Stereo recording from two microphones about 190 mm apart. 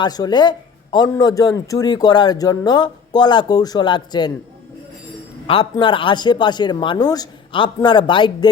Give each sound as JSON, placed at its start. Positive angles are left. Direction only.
{"t": 0.0, "sound": "a man's voice", "side_deg": 20}
{"t": 5.7, "sound": "a man's voice", "side_deg": 25}